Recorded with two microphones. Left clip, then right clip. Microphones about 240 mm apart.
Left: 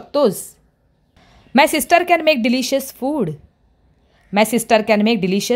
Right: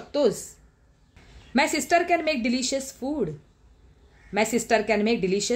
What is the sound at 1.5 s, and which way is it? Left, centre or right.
Speech, left.